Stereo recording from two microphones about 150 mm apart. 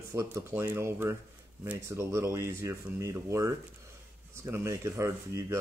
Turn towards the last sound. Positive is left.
turn(degrees=-20)  # may be behind; listen again after turning